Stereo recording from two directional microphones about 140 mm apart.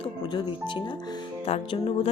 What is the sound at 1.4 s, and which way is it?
Music, 45° left (ahead or behind).